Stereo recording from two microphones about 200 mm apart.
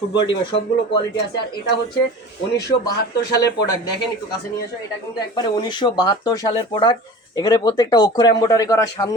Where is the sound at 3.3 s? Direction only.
15° left (ahead or behind).